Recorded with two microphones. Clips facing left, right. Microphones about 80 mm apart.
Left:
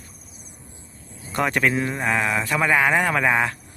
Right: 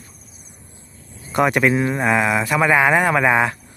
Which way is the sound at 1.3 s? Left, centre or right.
Centre.